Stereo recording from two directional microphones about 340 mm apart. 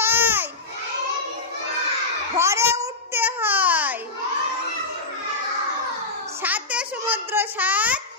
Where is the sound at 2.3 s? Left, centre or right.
Centre.